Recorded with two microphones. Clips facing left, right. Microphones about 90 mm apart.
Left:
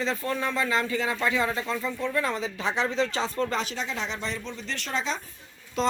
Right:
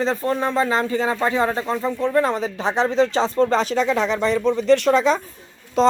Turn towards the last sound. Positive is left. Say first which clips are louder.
# right 10 dB
turn(degrees=-25)  # may be behind; listen again after turning